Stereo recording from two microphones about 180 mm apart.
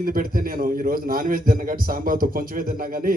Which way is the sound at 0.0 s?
50° right (ahead or behind).